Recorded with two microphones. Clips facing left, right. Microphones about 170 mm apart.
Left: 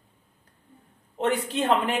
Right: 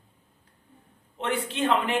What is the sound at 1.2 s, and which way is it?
Speech, 40° left (ahead or behind).